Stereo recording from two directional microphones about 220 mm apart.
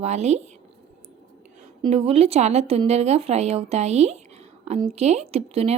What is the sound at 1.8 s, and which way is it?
Speech, 25° right (ahead or behind).